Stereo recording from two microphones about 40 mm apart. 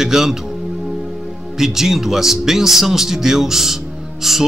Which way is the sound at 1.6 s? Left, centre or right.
Centre.